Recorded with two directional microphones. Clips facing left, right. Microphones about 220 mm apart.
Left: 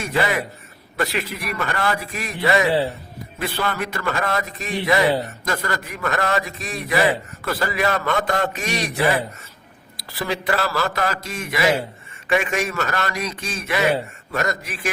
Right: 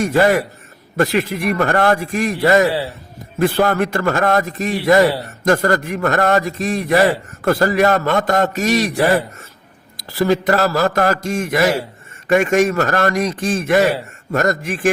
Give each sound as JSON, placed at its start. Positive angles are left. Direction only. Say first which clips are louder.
{"t": 0.0, "sound": "a man's voice", "louder": "right 8 dB", "side_deg": -50}